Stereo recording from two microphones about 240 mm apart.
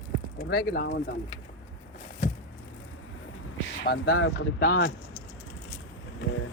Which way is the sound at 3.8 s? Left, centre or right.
Left.